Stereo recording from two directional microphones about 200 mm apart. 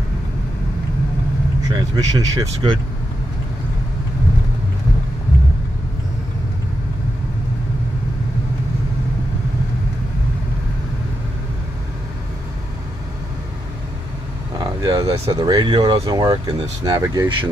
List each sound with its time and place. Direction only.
1.7 s speech: 20° right (ahead or behind)
14.6 s speech: 20° right (ahead or behind)